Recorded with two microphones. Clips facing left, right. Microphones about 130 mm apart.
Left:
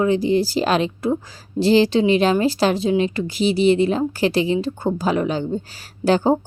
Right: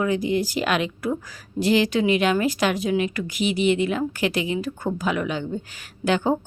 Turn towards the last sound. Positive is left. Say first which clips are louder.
# left 5 dB
turn(degrees=35)  # may be behind; listen again after turning